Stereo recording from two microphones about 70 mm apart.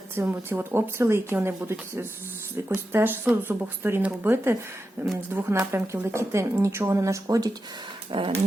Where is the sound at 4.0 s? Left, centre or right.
Right.